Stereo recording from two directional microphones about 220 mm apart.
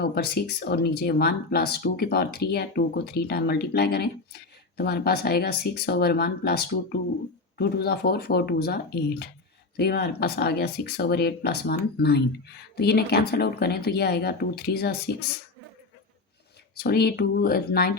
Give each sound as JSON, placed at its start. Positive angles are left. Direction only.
{"t": 0.0, "sound": "speech", "side_deg": 45}
{"t": 16.7, "sound": "speech", "side_deg": 45}